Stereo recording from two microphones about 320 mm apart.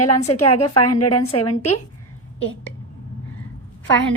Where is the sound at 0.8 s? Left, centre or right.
Left.